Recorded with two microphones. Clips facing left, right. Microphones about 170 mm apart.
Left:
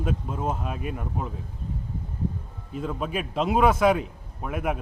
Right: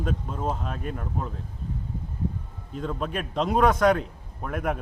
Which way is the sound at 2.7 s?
5° left (ahead or behind).